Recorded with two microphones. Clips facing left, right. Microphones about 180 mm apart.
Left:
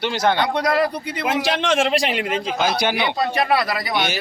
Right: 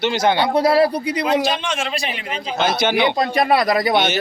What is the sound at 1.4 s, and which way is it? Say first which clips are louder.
Speech: left 3 dB; 85° left.